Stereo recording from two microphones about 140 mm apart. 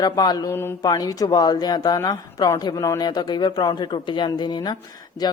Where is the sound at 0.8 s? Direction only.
25° left (ahead or behind).